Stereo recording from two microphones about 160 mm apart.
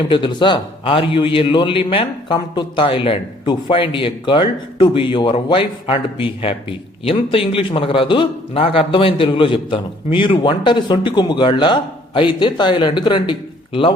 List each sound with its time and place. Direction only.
0.0 s a man's voice: 30° left (ahead or behind)